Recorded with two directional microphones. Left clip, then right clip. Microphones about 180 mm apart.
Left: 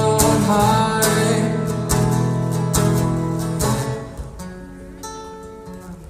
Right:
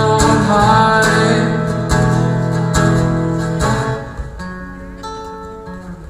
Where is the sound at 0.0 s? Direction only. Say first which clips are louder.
Right 4 dB; 45° left (ahead or behind).